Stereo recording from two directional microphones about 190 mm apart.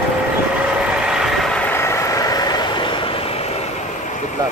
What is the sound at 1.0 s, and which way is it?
Vehicle, 5° right (ahead or behind).